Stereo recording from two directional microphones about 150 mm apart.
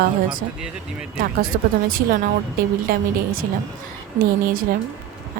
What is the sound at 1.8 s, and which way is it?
A woman's voice, 75° right (ahead or behind).